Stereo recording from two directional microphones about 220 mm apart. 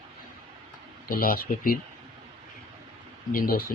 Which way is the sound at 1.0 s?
40° left (ahead or behind).